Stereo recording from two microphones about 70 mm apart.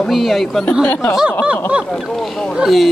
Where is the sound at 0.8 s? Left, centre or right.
Left.